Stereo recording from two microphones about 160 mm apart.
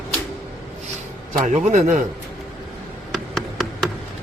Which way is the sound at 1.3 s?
45° right (ahead or behind).